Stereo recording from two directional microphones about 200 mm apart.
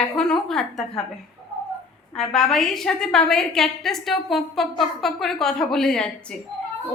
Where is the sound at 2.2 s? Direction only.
Centre (ahead or behind).